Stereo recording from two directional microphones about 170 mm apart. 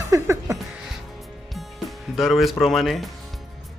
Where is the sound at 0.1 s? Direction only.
20° right (ahead or behind).